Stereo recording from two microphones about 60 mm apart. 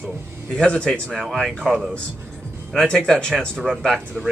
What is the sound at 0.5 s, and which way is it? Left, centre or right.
Speech, centre.